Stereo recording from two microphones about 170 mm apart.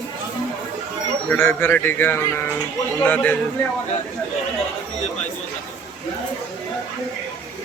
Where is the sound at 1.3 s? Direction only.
10° left (ahead or behind).